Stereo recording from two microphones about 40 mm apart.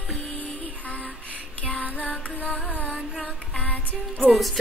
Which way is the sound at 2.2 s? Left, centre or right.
Left.